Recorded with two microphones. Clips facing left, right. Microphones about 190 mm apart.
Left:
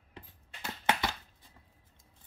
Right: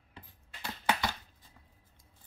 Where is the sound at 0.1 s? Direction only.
25° left (ahead or behind).